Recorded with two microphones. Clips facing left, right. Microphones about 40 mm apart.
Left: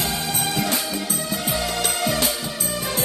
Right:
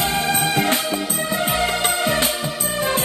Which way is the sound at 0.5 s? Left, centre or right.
Right.